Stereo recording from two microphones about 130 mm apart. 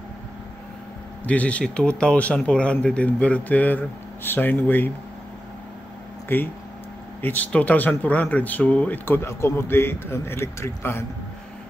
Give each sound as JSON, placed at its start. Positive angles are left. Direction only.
{"t": 1.2, "sound": "speech", "side_deg": 10}
{"t": 6.2, "sound": "speech", "side_deg": 15}